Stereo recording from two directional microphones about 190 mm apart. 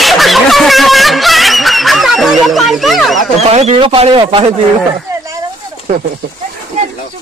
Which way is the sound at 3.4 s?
35° right (ahead or behind).